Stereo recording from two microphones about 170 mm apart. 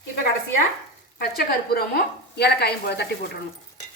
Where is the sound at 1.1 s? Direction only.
65° left (ahead or behind).